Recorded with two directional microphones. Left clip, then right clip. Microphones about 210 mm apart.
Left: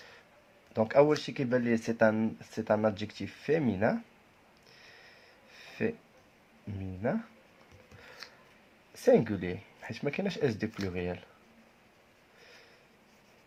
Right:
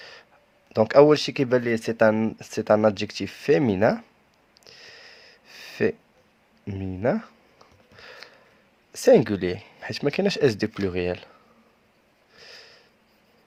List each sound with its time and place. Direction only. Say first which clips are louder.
0.7 s speech: right 9 dB; 50° right (ahead or behind)
4.6 s a sound: right 9 dB; 50° right (ahead or behind)
6.7 s speech: right 9 dB; 50° right (ahead or behind)
8.0 s a sound: right 9 dB; 50° right (ahead or behind)
8.9 s speech: right 8 dB; 45° right (ahead or behind)
12.4 s sniff: right 10 dB; 50° right (ahead or behind)